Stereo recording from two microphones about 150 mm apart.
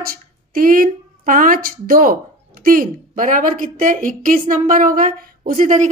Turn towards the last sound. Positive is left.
turn(degrees=-60)  # may be behind; listen again after turning